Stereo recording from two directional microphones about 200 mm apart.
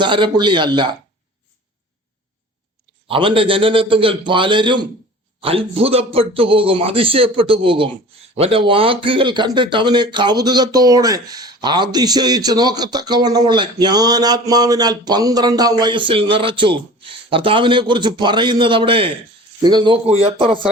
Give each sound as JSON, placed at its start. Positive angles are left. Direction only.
{"t": 0.0, "sound": "speech", "side_deg": -25}
{"t": 3.1, "sound": "speech", "side_deg": -25}